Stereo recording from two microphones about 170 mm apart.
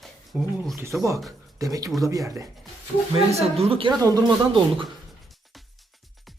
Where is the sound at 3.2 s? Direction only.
35° right (ahead or behind).